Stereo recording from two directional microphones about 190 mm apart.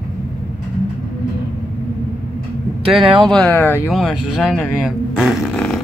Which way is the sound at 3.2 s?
5° left (ahead or behind).